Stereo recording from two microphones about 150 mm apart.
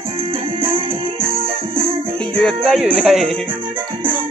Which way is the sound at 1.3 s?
40° right (ahead or behind).